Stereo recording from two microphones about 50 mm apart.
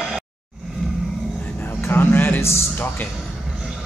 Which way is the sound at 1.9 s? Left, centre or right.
Left.